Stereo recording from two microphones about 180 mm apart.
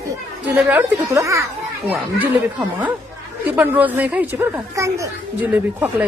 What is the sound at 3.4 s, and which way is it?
Speech, 10° right (ahead or behind).